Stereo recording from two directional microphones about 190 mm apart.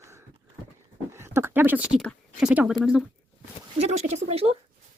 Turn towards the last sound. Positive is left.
turn(degrees=-30)  # may be behind; listen again after turning